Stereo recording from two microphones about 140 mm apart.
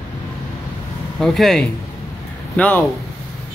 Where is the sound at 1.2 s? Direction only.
Centre (ahead or behind).